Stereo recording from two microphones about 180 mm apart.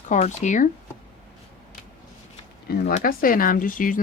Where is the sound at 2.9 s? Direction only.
50° left (ahead or behind).